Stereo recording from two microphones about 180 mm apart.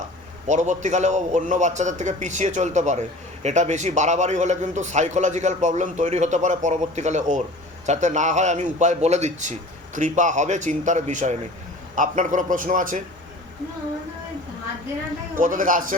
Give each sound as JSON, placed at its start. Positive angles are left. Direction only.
{"t": 0.4, "sound": "a man's voice", "side_deg": -40}
{"t": 15.4, "sound": "a man's voice", "side_deg": -50}